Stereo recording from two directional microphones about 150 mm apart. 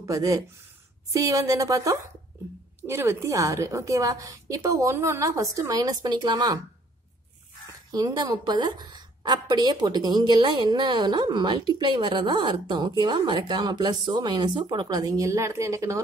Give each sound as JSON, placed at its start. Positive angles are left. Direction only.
{"t": 0.0, "sound": "a woman's voice", "side_deg": -20}
{"t": 7.9, "sound": "a woman's voice", "side_deg": -30}